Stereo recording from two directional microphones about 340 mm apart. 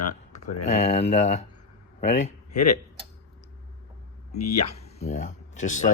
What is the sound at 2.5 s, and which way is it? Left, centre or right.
Speech, left.